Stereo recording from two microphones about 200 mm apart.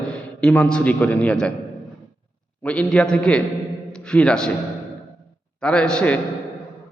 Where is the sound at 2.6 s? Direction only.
5° left (ahead or behind).